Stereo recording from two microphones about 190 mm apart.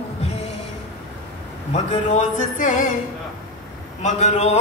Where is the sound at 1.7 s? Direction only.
35° left (ahead or behind).